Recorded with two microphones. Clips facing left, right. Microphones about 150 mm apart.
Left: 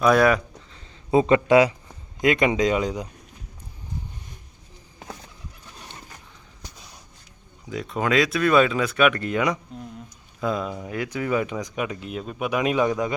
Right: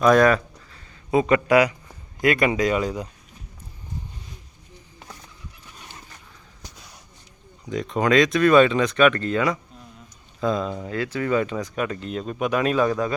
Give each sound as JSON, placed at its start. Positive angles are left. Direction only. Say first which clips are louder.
{"t": 0.0, "sound": "a sound", "louder": "right 2 dB", "side_deg": 10}
{"t": 1.1, "sound": "speech", "louder": "left 1 dB", "side_deg": 25}
{"t": 7.7, "sound": "speech", "louder": "right 3 dB", "side_deg": 5}